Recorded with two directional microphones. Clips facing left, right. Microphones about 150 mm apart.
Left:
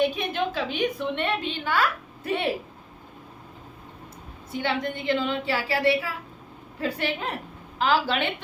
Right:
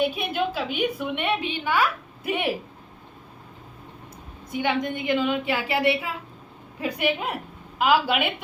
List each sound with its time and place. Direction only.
0.0 s a woman's voice: 10° right (ahead or behind)
4.5 s a woman's voice: 15° right (ahead or behind)